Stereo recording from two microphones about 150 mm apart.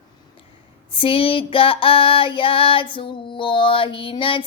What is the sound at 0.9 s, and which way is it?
Female singing, 35° left (ahead or behind).